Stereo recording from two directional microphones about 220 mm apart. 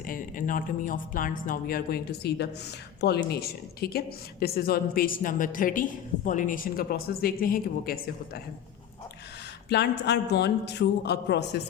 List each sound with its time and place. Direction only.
0.1 s a woman's voice: 40° left (ahead or behind)
9.6 s a woman's voice: 50° left (ahead or behind)